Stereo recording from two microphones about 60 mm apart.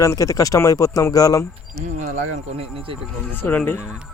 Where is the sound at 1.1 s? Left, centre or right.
Left.